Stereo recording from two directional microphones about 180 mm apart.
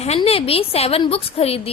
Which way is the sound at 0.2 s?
30° left (ahead or behind).